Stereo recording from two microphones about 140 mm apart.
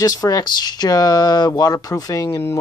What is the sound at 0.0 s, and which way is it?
Speech, 25° left (ahead or behind).